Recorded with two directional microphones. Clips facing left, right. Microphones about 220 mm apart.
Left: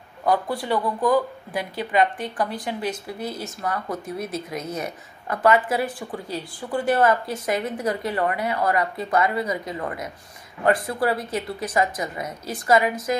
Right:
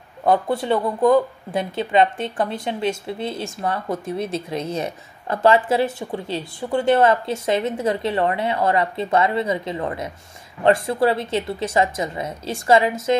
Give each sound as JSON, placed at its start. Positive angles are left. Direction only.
{"t": 0.2, "sound": "speech", "side_deg": -25}